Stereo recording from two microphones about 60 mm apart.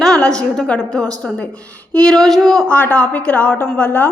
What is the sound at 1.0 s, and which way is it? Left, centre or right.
Speech, right.